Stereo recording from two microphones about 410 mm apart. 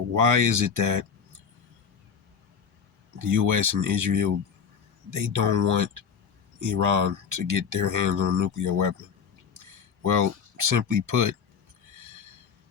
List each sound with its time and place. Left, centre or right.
0.1 s speech: right
3.2 s speech: right
9.6 s a sound: right
10.8 s speech: right